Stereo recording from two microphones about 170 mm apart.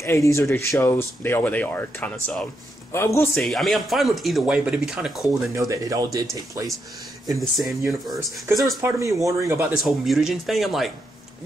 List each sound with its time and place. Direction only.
0.0 s speech: 15° left (ahead or behind)
3.4 s speech: centre (ahead or behind)
5.5 s speech: 20° right (ahead or behind)
7.2 s speech: centre (ahead or behind)
8.5 s speech: 15° right (ahead or behind)
9.8 s speech: centre (ahead or behind)